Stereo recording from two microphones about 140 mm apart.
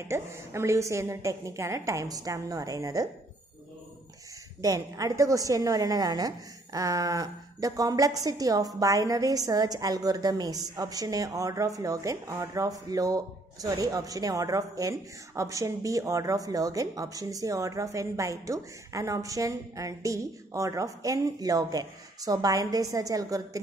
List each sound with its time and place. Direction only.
0.1 s a woman's voice: 20° right (ahead or behind)
4.6 s a woman's voice: 25° right (ahead or behind)